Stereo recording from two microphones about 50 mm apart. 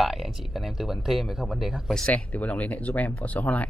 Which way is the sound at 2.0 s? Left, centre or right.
Left.